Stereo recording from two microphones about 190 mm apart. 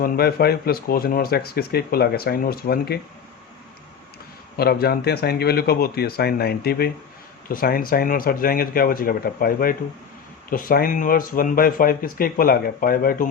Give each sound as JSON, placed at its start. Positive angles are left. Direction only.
{"t": 0.0, "sound": "speech", "side_deg": 55}
{"t": 4.5, "sound": "speech", "side_deg": 55}